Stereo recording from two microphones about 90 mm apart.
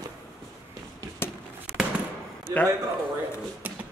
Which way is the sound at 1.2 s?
25° left (ahead or behind).